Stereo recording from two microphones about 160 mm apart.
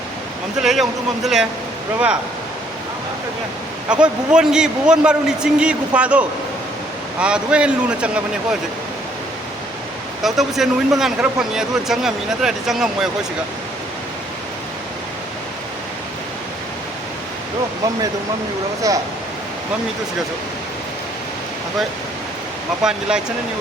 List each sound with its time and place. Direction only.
0.6 s speech: centre (ahead or behind)
3.8 s a man's voice: 5° right (ahead or behind)
10.2 s speech: centre (ahead or behind)
18.8 s speech: 20° right (ahead or behind)
22.8 s speech: 5° right (ahead or behind)